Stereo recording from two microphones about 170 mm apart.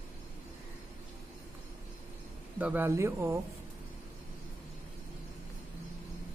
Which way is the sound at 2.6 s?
10° right (ahead or behind).